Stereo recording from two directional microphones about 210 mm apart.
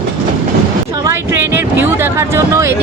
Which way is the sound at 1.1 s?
10° right (ahead or behind).